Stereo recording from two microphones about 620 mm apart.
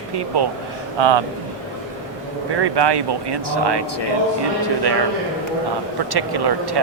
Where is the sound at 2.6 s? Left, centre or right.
Right.